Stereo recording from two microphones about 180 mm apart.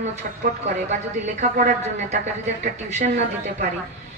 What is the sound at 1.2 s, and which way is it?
A woman's voice, 40° right (ahead or behind).